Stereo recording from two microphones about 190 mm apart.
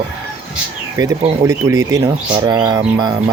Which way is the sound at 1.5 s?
15° right (ahead or behind).